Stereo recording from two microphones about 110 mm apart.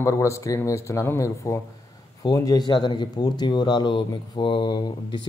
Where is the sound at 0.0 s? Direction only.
25° left (ahead or behind).